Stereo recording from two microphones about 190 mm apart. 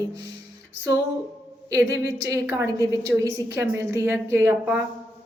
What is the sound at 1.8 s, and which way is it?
Speech, 65° left (ahead or behind).